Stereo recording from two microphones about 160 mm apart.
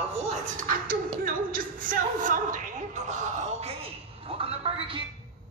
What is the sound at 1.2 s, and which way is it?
A woman's voice, 60° right (ahead or behind).